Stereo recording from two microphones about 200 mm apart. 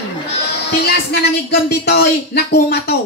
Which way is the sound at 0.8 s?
55° left (ahead or behind).